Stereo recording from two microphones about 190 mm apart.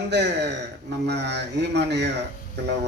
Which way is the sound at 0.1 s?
65° right (ahead or behind).